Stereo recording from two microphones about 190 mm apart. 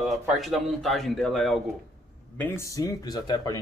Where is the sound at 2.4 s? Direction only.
15° left (ahead or behind).